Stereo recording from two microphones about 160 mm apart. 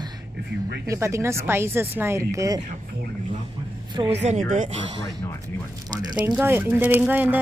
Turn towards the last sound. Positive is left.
turn(degrees=-10)  # may be behind; listen again after turning